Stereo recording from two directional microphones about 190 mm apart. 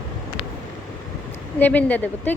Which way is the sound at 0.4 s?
30° left (ahead or behind).